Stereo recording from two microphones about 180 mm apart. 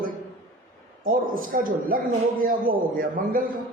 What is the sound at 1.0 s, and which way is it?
A man's voice, 50° right (ahead or behind).